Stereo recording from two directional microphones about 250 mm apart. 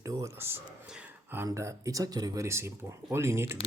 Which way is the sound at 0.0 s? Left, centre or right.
Centre.